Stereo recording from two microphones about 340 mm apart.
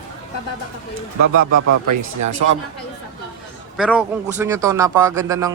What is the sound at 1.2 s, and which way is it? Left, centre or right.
Speech, right.